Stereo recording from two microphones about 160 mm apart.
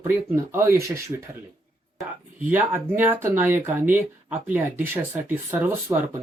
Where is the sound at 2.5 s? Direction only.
15° right (ahead or behind).